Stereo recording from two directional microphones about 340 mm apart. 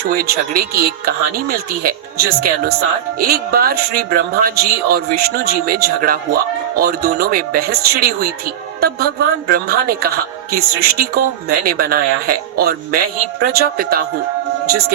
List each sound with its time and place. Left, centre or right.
0.0 s speech: right
9.5 s speech: right